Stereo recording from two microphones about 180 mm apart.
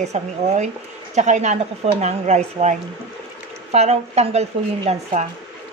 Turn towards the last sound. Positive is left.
turn(degrees=-35)  # may be behind; listen again after turning